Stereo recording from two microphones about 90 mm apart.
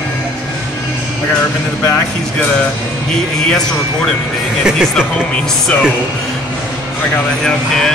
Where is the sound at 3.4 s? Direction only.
5° left (ahead or behind).